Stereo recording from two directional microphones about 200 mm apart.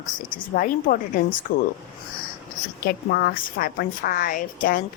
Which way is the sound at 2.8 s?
50° left (ahead or behind).